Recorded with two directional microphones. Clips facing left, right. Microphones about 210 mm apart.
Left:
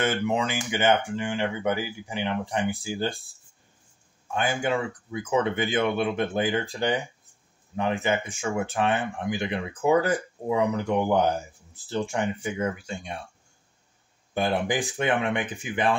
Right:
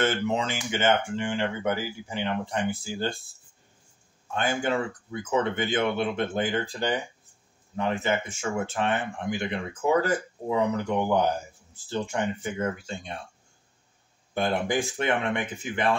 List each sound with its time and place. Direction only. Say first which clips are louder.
0.0 s speech: left 1 dB; 15° left (ahead or behind)
4.3 s speech: left 1 dB; 15° left (ahead or behind)
14.3 s speech: even; 15° left (ahead or behind)